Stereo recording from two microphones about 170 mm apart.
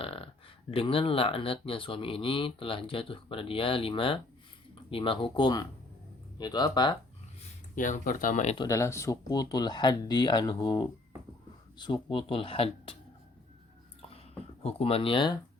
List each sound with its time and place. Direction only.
0.0 s a sound: 35° left (ahead or behind)
0.7 s speech: 35° left (ahead or behind)
4.7 s a sound: 30° left (ahead or behind)
5.2 s speech: 25° left (ahead or behind)
7.8 s speech: 50° left (ahead or behind)
8.5 s speech: 20° left (ahead or behind)
14.6 s speech: 35° left (ahead or behind)